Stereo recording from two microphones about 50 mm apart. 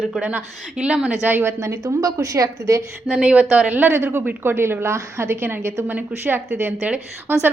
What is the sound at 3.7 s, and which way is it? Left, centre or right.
A woman's voice, right.